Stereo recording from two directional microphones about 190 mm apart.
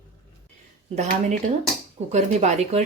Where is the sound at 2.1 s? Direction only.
35° right (ahead or behind).